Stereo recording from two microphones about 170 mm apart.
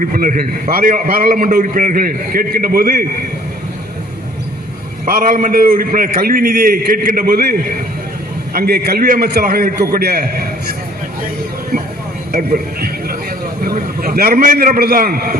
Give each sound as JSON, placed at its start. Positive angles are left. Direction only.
{"t": 0.0, "sound": "a man's voice", "side_deg": -55}
{"t": 5.0, "sound": "a man's voice", "side_deg": -55}
{"t": 8.5, "sound": "a man's voice", "side_deg": -65}
{"t": 12.3, "sound": "a man's voice", "side_deg": -65}